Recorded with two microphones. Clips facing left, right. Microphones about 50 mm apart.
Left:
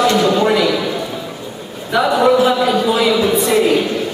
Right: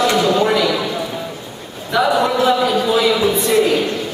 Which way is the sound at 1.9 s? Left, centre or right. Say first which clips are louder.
Left 3 dB; centre.